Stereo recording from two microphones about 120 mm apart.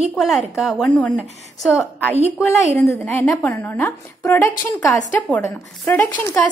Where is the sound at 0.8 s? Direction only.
10° left (ahead or behind).